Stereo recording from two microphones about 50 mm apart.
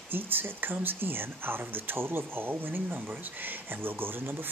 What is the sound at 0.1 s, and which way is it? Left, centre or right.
Speech, right.